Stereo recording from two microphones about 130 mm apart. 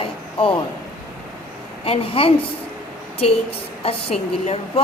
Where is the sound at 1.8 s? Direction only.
50° left (ahead or behind).